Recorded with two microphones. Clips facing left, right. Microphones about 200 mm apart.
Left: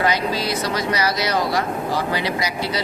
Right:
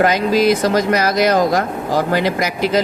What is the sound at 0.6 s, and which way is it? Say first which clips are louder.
Speech: right 7 dB; 50° right (ahead or behind).